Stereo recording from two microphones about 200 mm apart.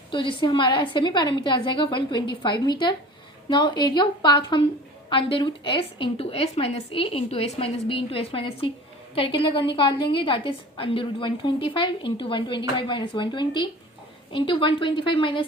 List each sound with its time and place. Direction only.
0.1 s a woman's voice: 25° left (ahead or behind)